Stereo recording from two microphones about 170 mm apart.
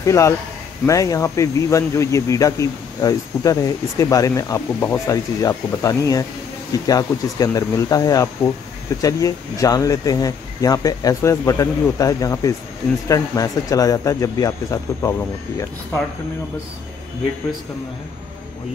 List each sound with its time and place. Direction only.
0.0 s a man's voice: 15° left (ahead or behind)